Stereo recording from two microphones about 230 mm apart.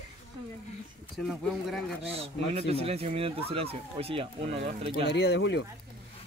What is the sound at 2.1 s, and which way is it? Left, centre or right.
Speech, right.